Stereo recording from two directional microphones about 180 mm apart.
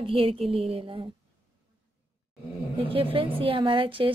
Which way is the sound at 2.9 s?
30° right (ahead or behind).